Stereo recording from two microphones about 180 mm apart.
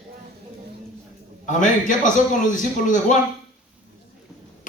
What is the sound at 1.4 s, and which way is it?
A man's voice, 45° left (ahead or behind).